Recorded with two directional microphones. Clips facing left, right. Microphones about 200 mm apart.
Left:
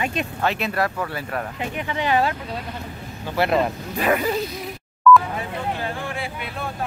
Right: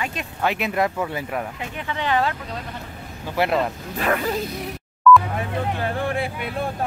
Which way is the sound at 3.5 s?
5° left (ahead or behind).